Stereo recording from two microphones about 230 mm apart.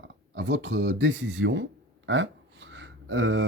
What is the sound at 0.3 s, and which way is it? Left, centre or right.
Speech, right.